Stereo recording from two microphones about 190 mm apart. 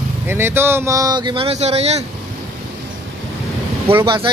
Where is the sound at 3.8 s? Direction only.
25° right (ahead or behind).